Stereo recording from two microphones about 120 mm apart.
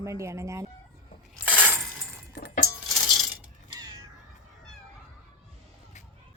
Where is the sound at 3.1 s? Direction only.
Centre (ahead or behind).